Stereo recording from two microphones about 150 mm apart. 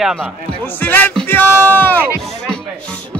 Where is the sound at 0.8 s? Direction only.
10° left (ahead or behind).